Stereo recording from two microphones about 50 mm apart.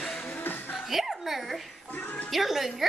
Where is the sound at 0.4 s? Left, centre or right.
Left.